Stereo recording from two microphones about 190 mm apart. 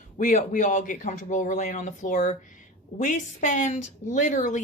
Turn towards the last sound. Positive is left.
turn(degrees=40)  # may be behind; listen again after turning